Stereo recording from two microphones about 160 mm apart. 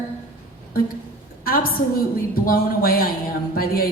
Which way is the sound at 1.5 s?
65° left (ahead or behind).